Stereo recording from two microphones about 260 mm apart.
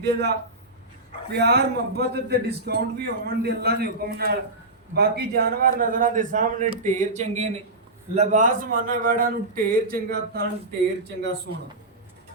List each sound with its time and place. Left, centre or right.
0.0 s a man's voice: right